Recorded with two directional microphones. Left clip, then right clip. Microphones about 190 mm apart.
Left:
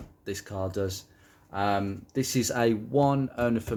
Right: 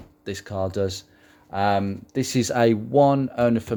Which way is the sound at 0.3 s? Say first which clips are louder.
Right 6 dB; 50° right (ahead or behind).